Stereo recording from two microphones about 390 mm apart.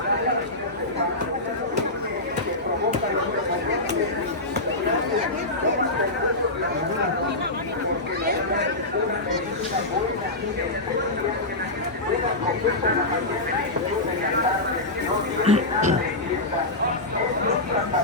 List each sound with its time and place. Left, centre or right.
15.4 s music: centre